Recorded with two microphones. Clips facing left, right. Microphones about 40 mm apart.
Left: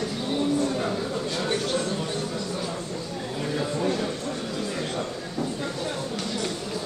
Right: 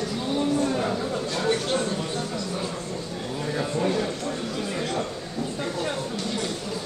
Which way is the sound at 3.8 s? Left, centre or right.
Centre.